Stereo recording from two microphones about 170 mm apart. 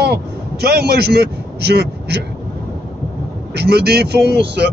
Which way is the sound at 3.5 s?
70° right (ahead or behind).